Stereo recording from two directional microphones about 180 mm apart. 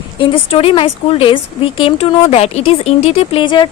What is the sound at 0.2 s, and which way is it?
Speech, 30° left (ahead or behind).